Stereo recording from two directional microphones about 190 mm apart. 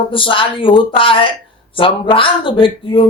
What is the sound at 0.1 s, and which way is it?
Speech, 25° left (ahead or behind).